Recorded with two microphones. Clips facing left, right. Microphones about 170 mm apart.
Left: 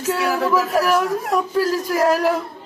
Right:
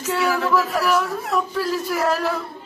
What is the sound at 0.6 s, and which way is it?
Speech, 40° left (ahead or behind).